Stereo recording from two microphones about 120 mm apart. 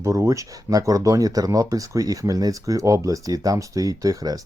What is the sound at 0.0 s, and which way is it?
Speech, 25° right (ahead or behind).